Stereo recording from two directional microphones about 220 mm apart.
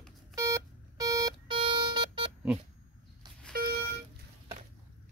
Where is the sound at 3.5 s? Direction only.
45° right (ahead or behind).